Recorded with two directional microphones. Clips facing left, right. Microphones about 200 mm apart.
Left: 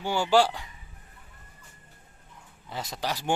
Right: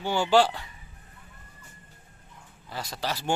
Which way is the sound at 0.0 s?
10° left (ahead or behind).